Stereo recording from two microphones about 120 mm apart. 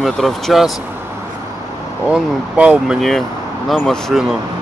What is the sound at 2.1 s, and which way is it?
Speech, 10° right (ahead or behind).